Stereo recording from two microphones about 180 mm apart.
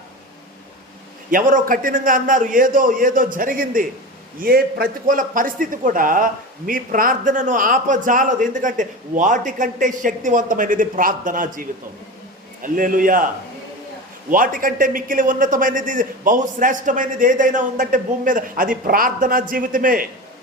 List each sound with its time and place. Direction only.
1.3 s a man's voice: 50° right (ahead or behind)
12.6 s a man's voice: 50° right (ahead or behind)
14.3 s a man's voice: 50° right (ahead or behind)